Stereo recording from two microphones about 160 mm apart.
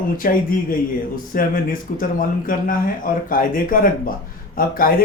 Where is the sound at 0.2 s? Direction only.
60° left (ahead or behind).